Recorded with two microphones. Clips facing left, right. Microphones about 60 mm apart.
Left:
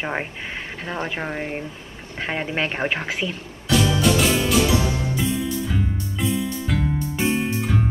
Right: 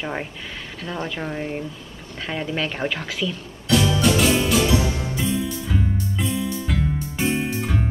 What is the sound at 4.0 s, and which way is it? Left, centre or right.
Music, centre.